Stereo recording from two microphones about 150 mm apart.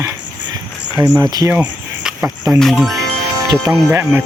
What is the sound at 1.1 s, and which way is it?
Speech, 25° right (ahead or behind).